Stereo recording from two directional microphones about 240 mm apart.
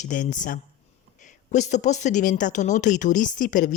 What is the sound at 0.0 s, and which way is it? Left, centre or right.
Speech, left.